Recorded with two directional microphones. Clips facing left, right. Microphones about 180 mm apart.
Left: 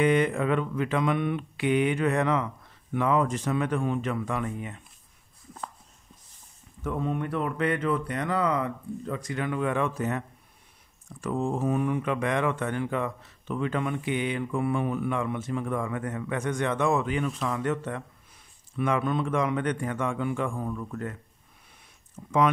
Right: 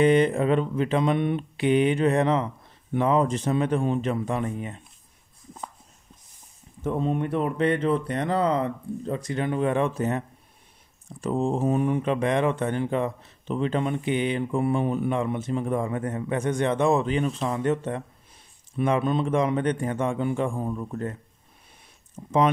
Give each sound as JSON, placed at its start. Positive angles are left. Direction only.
{"t": 0.0, "sound": "speech", "side_deg": -30}
{"t": 6.8, "sound": "speech", "side_deg": -25}